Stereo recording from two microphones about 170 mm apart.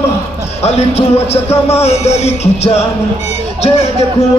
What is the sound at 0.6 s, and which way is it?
Speech, 40° left (ahead or behind).